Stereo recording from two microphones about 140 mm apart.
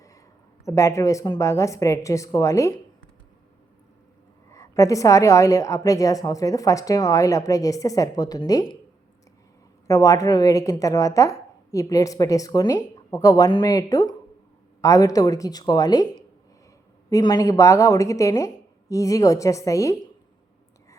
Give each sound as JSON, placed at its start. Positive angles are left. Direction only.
{"t": 0.6, "sound": "a woman's voice", "side_deg": 20}
{"t": 4.5, "sound": "a woman's voice", "side_deg": 20}
{"t": 9.8, "sound": "a woman's voice", "side_deg": 25}
{"t": 17.1, "sound": "a woman's voice", "side_deg": 25}